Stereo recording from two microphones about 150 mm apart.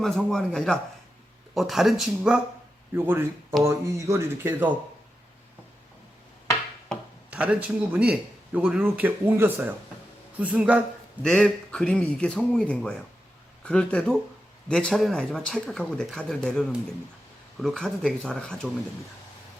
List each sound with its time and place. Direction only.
0.0 s speech: 5° left (ahead or behind)
2.9 s a man's voice: 15° right (ahead or behind)
7.3 s a man's voice: 10° right (ahead or behind)
11.2 s speech: 5° left (ahead or behind)